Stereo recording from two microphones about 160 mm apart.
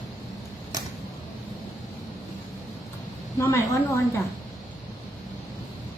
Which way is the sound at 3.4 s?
15° left (ahead or behind).